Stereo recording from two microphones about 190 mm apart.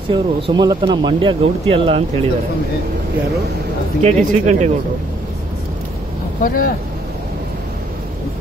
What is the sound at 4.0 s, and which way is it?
Speech, 35° right (ahead or behind).